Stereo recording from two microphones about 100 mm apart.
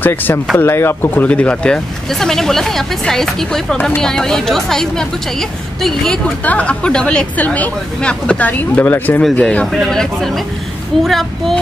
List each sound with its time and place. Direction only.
0.0 s speech: 20° left (ahead or behind); by 6.1 s centre (ahead or behind)
6.4 s speech: 15° left (ahead or behind)